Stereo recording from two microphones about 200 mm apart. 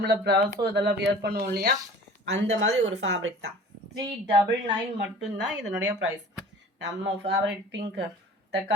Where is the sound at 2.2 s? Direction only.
60° right (ahead or behind).